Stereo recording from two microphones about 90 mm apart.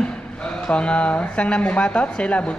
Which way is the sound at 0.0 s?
10° left (ahead or behind).